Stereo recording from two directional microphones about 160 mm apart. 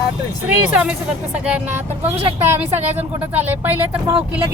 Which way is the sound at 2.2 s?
40° right (ahead or behind).